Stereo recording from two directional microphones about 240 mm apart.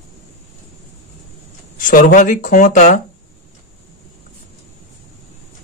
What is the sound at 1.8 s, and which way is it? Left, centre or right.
Speech, left.